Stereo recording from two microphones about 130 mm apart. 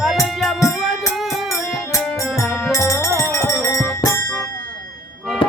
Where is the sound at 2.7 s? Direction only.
25° left (ahead or behind).